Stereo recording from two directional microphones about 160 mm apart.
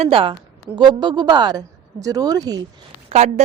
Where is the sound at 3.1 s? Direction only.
40° right (ahead or behind).